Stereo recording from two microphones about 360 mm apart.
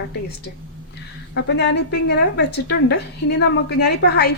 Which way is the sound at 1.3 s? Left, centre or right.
Left.